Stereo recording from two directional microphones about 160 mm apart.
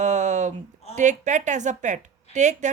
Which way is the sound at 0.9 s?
50° right (ahead or behind).